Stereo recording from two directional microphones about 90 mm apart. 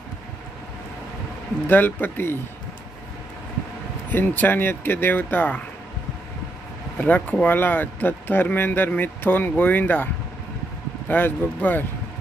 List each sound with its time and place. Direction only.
1.7 s speech: 20° left (ahead or behind)
4.1 s speech: 20° left (ahead or behind)
7.0 s speech: 15° left (ahead or behind)
11.1 s speech: 20° left (ahead or behind)